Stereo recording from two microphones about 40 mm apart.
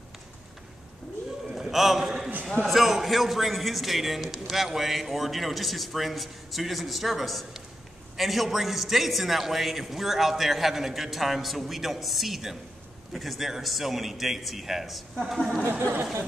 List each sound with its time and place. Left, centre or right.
1.5 s a sound: centre
2.6 s a man's voice: centre
15.8 s speech: right